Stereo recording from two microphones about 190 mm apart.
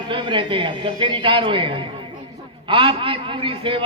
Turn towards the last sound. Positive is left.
turn(degrees=-25)  # may be behind; listen again after turning